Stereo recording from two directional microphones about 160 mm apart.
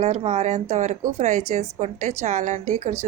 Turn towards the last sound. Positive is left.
turn(degrees=-45)  # may be behind; listen again after turning